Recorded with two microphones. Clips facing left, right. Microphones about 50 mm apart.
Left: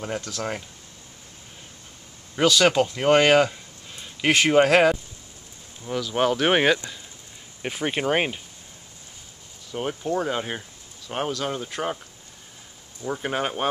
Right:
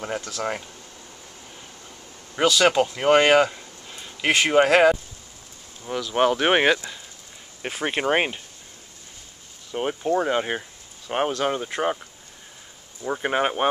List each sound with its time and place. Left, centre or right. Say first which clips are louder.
0.0 s speech: right 1 dB; centre
2.3 s speech: even; centre
9.7 s speech: right 3 dB; centre
13.0 s speech: right 3 dB; centre